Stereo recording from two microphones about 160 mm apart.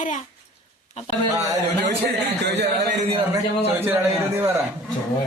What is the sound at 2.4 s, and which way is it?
Speech, 90° right.